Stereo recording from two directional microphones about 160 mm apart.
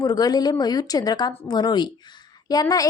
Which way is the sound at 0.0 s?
25° left (ahead or behind).